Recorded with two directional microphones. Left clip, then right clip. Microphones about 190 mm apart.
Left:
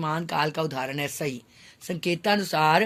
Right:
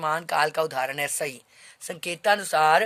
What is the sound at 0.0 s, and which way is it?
Speech, 40° right (ahead or behind).